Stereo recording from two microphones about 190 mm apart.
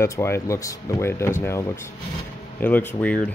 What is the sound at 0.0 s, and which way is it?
Speech, 15° left (ahead or behind).